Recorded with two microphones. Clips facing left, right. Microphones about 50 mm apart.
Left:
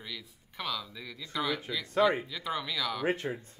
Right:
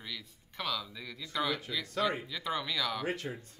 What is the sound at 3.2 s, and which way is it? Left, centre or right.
Speech, left.